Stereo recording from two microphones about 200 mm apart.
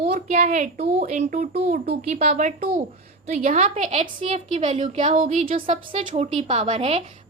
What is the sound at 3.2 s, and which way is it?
A woman's voice, 35° right (ahead or behind).